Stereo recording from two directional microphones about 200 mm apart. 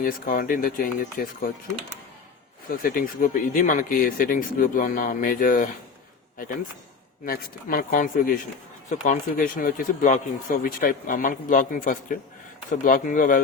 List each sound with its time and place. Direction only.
0.0 s speech: 45° left (ahead or behind)
2.6 s speech: 45° left (ahead or behind)
7.3 s speech: 45° left (ahead or behind)